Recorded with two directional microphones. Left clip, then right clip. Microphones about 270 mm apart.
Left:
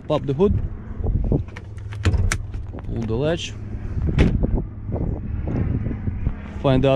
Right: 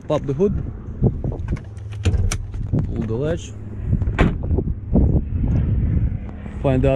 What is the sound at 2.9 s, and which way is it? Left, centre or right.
Speech, centre.